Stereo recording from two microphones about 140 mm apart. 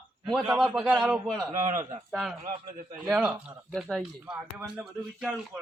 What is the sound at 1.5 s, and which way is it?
Speech, 65° right (ahead or behind).